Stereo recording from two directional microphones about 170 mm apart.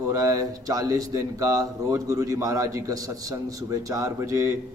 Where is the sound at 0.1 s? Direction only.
20° right (ahead or behind).